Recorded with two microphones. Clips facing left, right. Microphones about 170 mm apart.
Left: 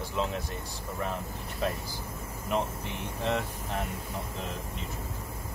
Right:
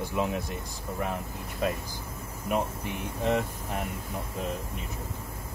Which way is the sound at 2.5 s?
10° right (ahead or behind).